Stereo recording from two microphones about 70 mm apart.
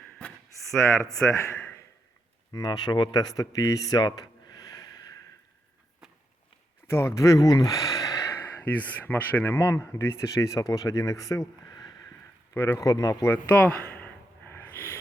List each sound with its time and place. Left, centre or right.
1.2 s a man's voice: left
2.5 s speech: left
3.9 s gasp: left
6.8 s speech: left
7.6 s a sound: left
8.3 s speech: left
12.5 s speech: left
12.8 s speech: left
13.2 s a sound: left